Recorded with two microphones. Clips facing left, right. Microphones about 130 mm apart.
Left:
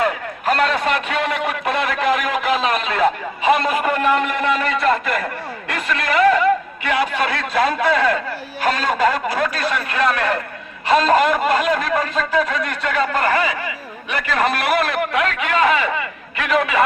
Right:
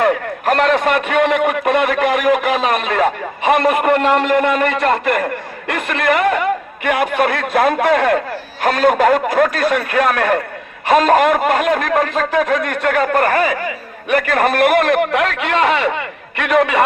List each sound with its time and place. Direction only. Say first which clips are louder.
0.0 s a man's voice: right 5 dB; 50° right (ahead or behind)